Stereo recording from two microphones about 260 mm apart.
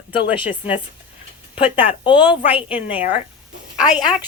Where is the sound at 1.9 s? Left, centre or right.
Centre.